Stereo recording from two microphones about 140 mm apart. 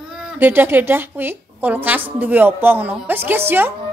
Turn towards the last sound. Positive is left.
turn(degrees=-15)  # may be behind; listen again after turning